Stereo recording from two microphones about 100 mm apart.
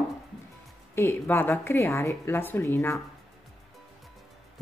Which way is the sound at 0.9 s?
25° left (ahead or behind).